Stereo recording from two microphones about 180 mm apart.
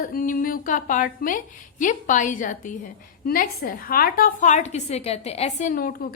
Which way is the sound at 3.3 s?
55° left (ahead or behind).